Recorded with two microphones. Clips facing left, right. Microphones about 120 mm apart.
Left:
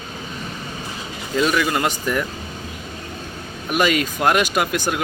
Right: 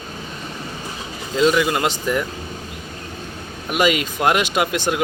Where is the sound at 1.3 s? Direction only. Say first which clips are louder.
Right 2 dB; 20° right (ahead or behind).